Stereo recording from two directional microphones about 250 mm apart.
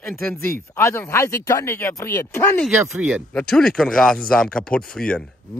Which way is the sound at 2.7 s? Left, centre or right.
Centre.